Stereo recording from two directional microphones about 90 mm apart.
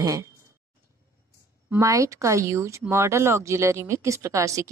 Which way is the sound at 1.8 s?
35° right (ahead or behind).